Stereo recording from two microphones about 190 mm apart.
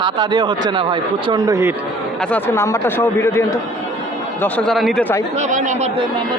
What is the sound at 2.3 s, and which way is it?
Speech, 15° left (ahead or behind).